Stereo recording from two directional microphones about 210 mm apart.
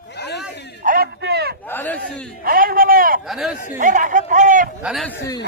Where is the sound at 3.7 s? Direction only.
40° right (ahead or behind).